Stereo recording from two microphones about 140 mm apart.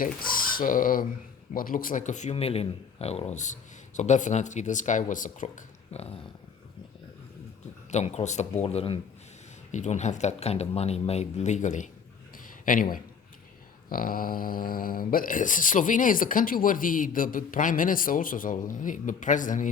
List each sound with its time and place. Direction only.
0.0 s speech: 90° left; by 6.1 s 50° left (ahead or behind)
7.9 s speech: 55° left (ahead or behind)
9.7 s speech: 55° left (ahead or behind)
12.6 s a man's voice: 80° left
13.9 s speech: 90° left; by 19.7 s 70° left (ahead or behind)